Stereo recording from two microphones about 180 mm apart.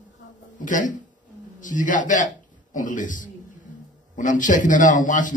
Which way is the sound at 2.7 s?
45° left (ahead or behind).